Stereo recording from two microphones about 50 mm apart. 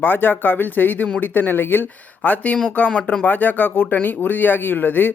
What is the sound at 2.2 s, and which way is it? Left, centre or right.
Speech, left.